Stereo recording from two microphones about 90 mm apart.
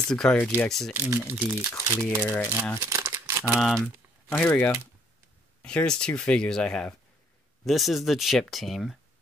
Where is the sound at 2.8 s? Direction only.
35° right (ahead or behind).